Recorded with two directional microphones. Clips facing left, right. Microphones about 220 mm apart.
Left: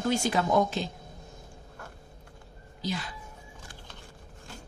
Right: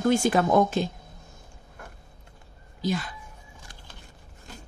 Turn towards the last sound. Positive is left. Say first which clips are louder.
# right 6 dB
turn(degrees=-50)  # may be behind; listen again after turning